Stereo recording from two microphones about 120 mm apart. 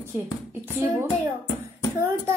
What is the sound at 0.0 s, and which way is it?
Speech, 20° right (ahead or behind).